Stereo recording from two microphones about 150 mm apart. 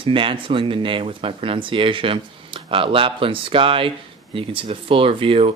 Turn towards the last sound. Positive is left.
turn(degrees=-40)  # may be behind; listen again after turning